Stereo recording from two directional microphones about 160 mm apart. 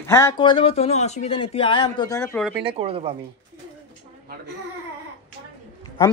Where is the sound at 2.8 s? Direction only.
35° right (ahead or behind).